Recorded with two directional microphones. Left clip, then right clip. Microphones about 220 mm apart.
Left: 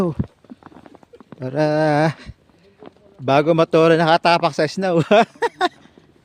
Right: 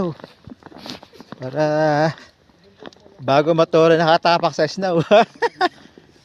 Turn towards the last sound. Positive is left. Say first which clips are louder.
# right 1 dB
turn(degrees=25)  # may be behind; listen again after turning